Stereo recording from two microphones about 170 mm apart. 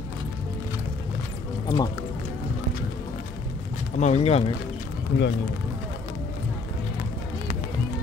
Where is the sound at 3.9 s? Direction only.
40° left (ahead or behind).